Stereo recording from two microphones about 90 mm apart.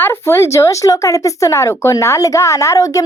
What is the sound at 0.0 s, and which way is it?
Speech, 30° left (ahead or behind).